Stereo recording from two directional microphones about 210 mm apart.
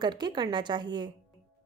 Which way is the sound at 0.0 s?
20° right (ahead or behind).